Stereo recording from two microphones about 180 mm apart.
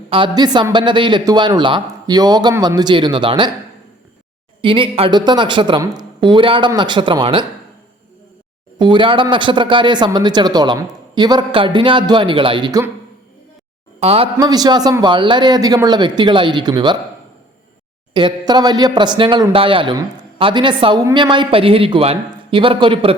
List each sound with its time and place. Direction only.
0.1 s speech: 25° right (ahead or behind)
4.6 s speech: 30° right (ahead or behind)
8.8 s speech: 25° right (ahead or behind)
14.0 s speech: 30° right (ahead or behind)
18.1 s speech: 25° right (ahead or behind)